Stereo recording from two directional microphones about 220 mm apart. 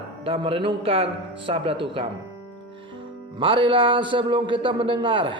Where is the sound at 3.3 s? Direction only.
25° right (ahead or behind).